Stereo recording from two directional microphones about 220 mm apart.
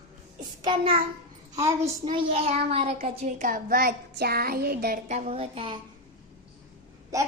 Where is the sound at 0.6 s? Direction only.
25° right (ahead or behind).